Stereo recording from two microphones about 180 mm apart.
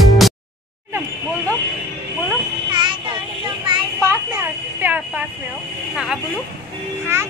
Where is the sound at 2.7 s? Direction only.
25° right (ahead or behind).